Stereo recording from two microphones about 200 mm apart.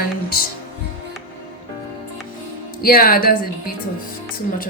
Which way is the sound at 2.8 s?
45° left (ahead or behind).